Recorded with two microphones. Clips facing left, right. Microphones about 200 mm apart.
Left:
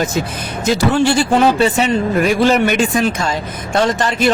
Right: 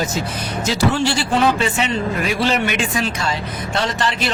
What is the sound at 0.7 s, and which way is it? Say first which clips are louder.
Speech: left 5 dB; 55° left (ahead or behind).